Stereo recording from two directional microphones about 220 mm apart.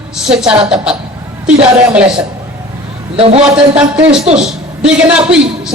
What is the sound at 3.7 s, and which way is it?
A man's voice, 5° right (ahead or behind).